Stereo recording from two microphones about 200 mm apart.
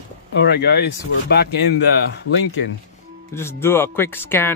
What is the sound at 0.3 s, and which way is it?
Speech, 55° left (ahead or behind).